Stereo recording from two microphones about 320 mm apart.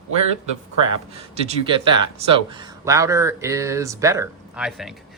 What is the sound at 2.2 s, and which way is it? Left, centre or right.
Speech, centre.